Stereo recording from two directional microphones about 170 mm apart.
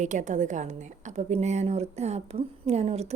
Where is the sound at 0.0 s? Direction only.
45° right (ahead or behind).